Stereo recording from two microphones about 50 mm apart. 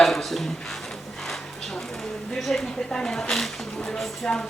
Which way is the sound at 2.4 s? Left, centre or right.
Centre.